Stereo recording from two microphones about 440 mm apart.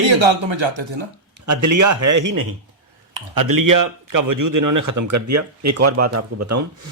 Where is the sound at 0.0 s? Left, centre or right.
Right.